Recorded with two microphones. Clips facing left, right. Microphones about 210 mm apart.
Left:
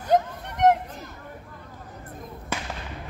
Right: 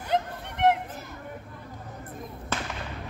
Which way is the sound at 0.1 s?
45° left (ahead or behind).